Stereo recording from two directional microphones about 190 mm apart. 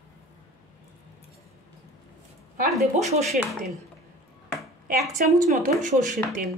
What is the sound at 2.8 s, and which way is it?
Speech, 35° right (ahead or behind).